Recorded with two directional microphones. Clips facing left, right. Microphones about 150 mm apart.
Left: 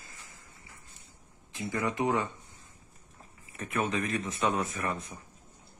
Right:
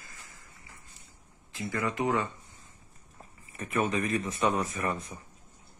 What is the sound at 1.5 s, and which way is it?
Speech, 20° left (ahead or behind).